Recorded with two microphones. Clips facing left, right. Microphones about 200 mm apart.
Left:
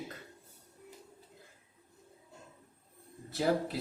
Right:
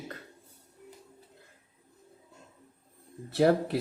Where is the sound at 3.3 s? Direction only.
65° right (ahead or behind).